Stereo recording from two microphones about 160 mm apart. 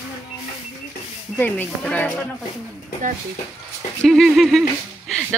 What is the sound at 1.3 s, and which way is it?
Speech, 10° left (ahead or behind).